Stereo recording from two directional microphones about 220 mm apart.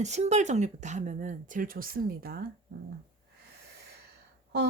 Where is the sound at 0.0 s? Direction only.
30° right (ahead or behind).